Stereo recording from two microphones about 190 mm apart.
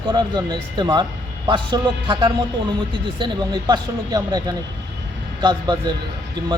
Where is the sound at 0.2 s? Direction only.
20° right (ahead or behind).